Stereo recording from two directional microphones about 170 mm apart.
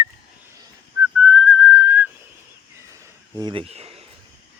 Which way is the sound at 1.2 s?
5° right (ahead or behind).